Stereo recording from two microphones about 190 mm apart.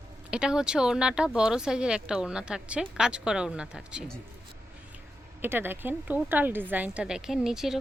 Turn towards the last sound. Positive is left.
turn(degrees=0)  # may be behind; listen again after turning